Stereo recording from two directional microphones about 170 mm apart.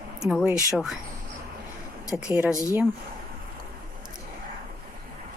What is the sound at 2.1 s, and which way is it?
Speech, 5° right (ahead or behind).